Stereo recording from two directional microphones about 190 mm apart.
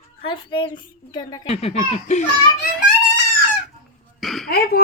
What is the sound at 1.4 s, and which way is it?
Speech, 35° left (ahead or behind).